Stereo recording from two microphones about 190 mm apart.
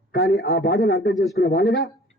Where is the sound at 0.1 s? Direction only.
60° left (ahead or behind).